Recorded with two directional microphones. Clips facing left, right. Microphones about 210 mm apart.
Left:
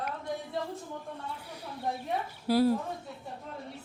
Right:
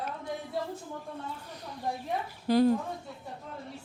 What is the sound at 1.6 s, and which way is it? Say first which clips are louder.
A woman's voice: even; 5° left (ahead or behind).